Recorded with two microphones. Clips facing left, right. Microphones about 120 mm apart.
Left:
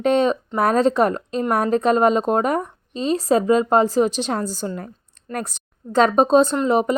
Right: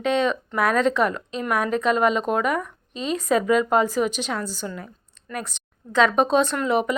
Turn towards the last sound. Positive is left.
turn(degrees=30)  # may be behind; listen again after turning